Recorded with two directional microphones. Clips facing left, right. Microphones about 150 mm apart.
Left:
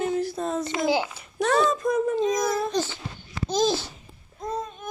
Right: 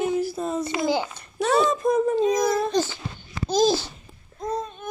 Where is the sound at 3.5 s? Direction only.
35° right (ahead or behind).